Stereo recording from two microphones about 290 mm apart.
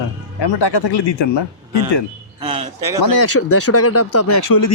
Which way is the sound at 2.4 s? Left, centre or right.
Centre.